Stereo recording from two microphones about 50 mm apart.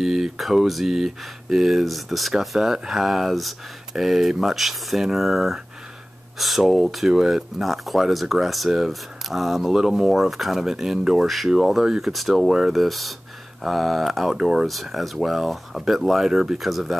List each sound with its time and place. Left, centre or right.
0.0 s speech: centre
14.3 s speech: centre
14.7 s speech: centre